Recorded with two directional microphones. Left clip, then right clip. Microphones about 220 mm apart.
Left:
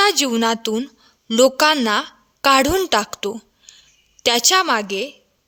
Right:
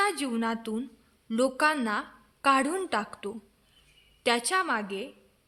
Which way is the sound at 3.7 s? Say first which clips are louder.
Left 17 dB; 45° left (ahead or behind).